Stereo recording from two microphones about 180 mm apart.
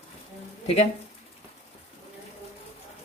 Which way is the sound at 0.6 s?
35° left (ahead or behind).